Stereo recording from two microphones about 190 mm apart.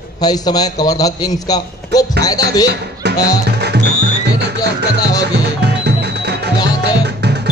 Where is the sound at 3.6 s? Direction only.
60° right (ahead or behind).